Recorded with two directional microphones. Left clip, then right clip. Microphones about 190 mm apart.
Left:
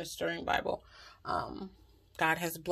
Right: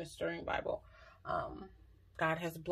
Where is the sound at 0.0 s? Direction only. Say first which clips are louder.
Left 4 dB; 30° left (ahead or behind).